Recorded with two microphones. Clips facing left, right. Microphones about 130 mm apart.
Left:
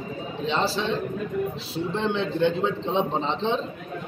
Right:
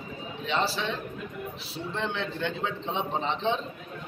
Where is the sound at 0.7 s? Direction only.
30° left (ahead or behind).